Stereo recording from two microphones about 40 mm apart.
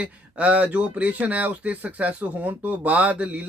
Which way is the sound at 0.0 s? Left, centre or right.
Right.